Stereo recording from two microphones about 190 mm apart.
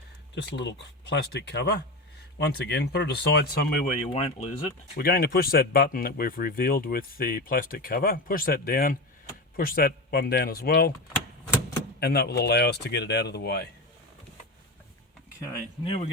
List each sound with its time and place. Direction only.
0.3 s speech: 65° left (ahead or behind)
3.9 s speech: 30° left (ahead or behind)
4.9 s speech: 55° left (ahead or behind)
11.9 s speech: 55° left (ahead or behind)
15.8 s speech: 30° left (ahead or behind)